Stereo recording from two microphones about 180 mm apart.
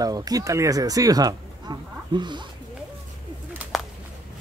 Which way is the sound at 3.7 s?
Centre (ahead or behind).